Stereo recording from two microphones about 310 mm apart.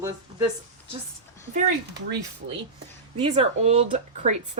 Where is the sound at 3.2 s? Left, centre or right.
Centre.